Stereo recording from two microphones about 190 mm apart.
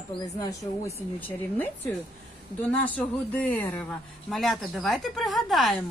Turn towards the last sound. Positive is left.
turn(degrees=0)  # may be behind; listen again after turning